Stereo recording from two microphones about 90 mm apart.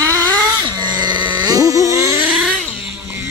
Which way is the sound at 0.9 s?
55° right (ahead or behind).